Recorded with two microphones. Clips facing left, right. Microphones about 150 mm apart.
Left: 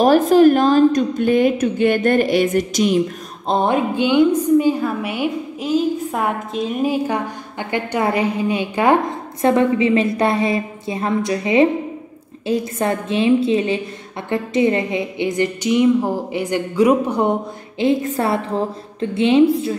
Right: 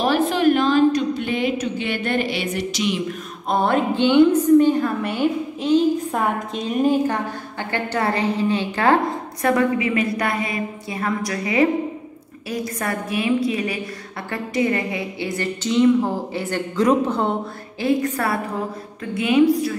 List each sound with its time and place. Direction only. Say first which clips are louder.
0.0 s a woman's voice: left 7 dB; 40° left (ahead or behind)
3.4 s a woman's voice: left 2 dB; 20° left (ahead or behind)